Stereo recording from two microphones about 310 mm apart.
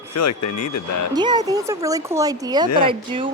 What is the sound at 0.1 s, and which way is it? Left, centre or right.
Speech, left.